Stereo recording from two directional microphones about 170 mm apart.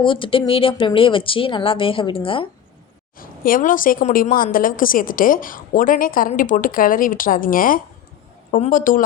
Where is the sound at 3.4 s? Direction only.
55° left (ahead or behind).